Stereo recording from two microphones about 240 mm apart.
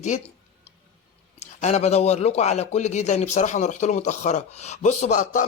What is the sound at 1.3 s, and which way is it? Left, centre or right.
A man's voice, left.